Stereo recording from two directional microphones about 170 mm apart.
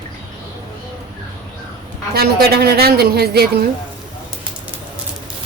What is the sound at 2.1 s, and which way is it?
A woman's voice, 65° right (ahead or behind).